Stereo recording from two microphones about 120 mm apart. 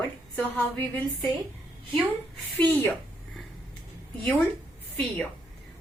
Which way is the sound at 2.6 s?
15° left (ahead or behind).